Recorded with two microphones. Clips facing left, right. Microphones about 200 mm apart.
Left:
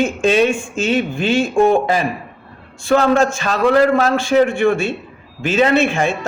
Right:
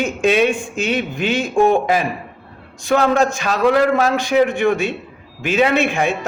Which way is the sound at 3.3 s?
15° right (ahead or behind).